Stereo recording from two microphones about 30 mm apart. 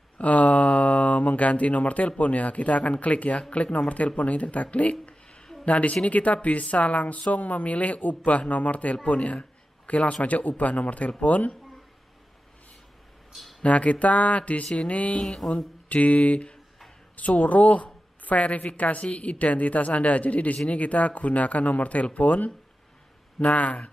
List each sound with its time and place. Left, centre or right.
0.2 s speech: left
3.9 s speech: left
13.6 s speech: left
15.4 s speech: left
15.9 s a woman's voice: left
23.4 s speech: left